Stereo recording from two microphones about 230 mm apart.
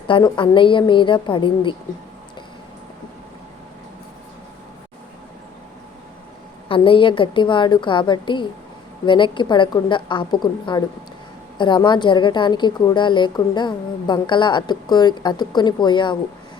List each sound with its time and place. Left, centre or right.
0.1 s a woman's voice: left
6.7 s a woman's voice: left